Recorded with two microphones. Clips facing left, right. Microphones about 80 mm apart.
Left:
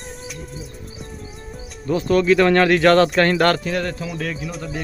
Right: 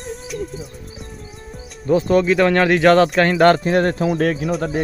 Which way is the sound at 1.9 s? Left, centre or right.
Centre.